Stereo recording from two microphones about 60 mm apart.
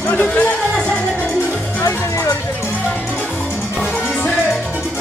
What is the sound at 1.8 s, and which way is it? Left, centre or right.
Music, left.